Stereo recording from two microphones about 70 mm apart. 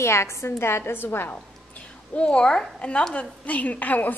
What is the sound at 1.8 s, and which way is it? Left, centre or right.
A woman's voice, centre.